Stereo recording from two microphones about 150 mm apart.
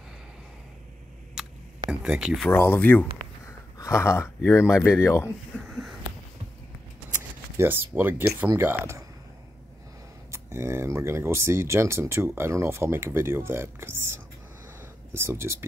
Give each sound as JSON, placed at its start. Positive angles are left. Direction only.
{"t": 1.9, "sound": "speech", "side_deg": -5}
{"t": 2.4, "sound": "speech", "side_deg": 15}
{"t": 5.7, "sound": "a sound", "side_deg": 0}
{"t": 7.5, "sound": "speech", "side_deg": -15}
{"t": 10.3, "sound": "speech", "side_deg": -15}
{"t": 14.8, "sound": "a sound", "side_deg": -15}